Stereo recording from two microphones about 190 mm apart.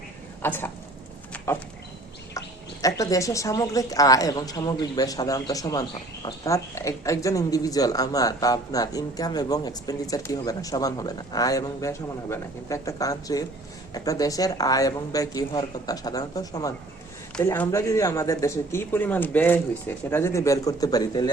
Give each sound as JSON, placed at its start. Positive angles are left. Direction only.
{"t": 0.4, "sound": "speech", "side_deg": 10}
{"t": 2.8, "sound": "speech", "side_deg": 15}